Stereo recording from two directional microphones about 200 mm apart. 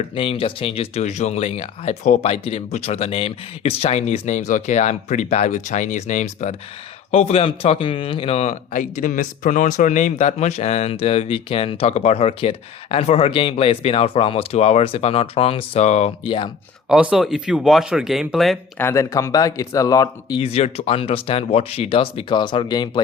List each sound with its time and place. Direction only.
0.2 s speech: 25° left (ahead or behind)
16.9 s speech: 5° right (ahead or behind)
18.8 s speech: 15° left (ahead or behind)
20.4 s speech: 30° left (ahead or behind)